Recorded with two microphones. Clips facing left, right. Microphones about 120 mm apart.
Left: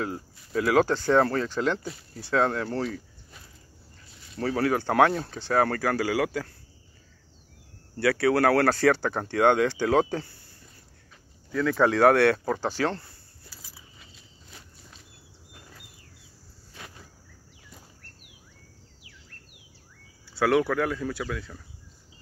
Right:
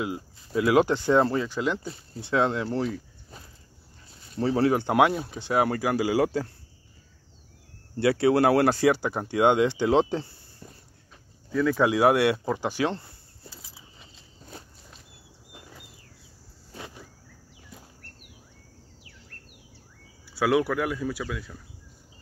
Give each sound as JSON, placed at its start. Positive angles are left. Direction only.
{"t": 0.4, "sound": "speech", "side_deg": -20}
{"t": 1.9, "sound": "speech", "side_deg": -20}
{"t": 2.9, "sound": "a sound", "side_deg": -35}
{"t": 4.4, "sound": "speech", "side_deg": -25}
{"t": 7.9, "sound": "speech", "side_deg": -20}
{"t": 11.5, "sound": "a sound", "side_deg": -10}
{"t": 16.7, "sound": "cricket", "side_deg": -20}
{"t": 20.3, "sound": "speech", "side_deg": -10}